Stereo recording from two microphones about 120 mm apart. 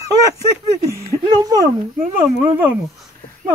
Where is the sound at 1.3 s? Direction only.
30° right (ahead or behind).